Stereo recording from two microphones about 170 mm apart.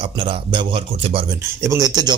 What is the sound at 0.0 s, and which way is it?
Speech, 30° right (ahead or behind).